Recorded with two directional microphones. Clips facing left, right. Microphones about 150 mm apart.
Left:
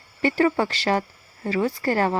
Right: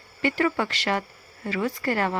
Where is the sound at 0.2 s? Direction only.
35° left (ahead or behind).